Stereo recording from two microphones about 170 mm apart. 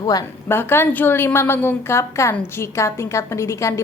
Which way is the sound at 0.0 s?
20° left (ahead or behind).